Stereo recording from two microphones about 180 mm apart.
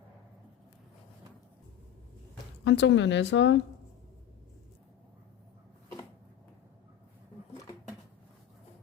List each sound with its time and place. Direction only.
2.6 s a woman's voice: 90° left